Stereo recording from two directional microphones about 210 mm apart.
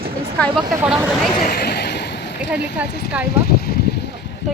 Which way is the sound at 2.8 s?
50° left (ahead or behind).